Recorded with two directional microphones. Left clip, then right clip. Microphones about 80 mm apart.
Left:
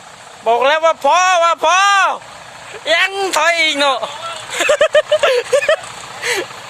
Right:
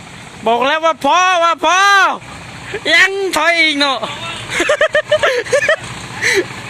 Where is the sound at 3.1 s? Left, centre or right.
Left.